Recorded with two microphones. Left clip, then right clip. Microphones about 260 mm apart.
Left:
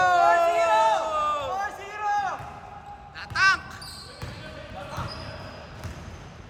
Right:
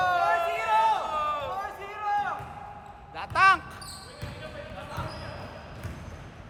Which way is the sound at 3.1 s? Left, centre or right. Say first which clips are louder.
Right 1 dB; centre.